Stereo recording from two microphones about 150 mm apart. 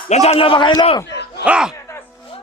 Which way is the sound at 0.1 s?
45° left (ahead or behind).